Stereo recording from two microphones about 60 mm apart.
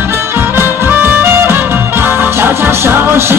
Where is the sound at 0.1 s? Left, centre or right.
Right.